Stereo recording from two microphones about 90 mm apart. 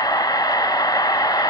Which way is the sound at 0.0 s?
45° left (ahead or behind).